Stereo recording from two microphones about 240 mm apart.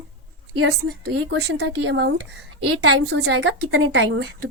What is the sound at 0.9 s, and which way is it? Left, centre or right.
Speech, right.